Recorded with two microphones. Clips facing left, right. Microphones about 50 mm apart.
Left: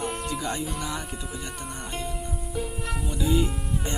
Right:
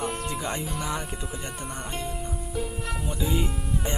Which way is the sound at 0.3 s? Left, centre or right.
Right.